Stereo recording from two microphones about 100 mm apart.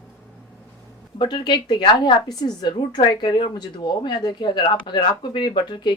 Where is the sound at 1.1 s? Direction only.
50° left (ahead or behind).